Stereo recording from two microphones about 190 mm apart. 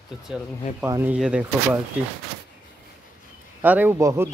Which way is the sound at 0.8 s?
10° right (ahead or behind).